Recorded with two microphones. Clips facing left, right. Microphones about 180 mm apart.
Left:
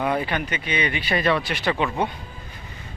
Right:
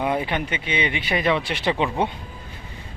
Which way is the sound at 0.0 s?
20° right (ahead or behind).